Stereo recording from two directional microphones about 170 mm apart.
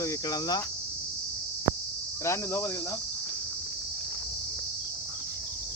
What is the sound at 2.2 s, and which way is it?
Speech, 15° left (ahead or behind).